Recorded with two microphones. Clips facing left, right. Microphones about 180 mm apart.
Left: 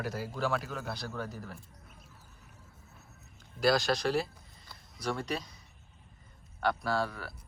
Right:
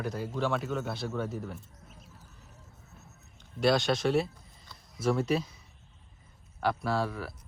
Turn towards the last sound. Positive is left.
turn(degrees=0)  # may be behind; listen again after turning